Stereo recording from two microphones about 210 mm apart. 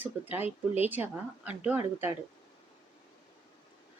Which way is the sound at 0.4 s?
30° left (ahead or behind).